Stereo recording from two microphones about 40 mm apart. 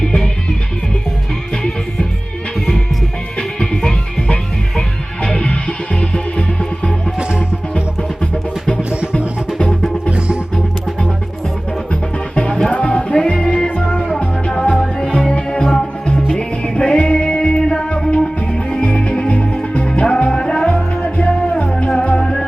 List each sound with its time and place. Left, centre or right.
3.3 s music: left
7.2 s music: right
8.8 s music: right
9.6 s music: centre
10.1 s music: right
12.3 s music: left
12.7 s music: left
13.7 s music: left
14.7 s music: centre